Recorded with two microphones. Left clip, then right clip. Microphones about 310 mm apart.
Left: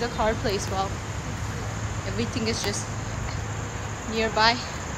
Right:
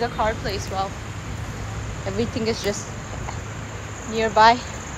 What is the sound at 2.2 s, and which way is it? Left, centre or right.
Speech, centre.